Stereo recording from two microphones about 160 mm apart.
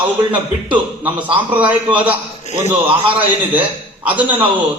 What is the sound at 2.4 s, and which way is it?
Speech, 45° left (ahead or behind).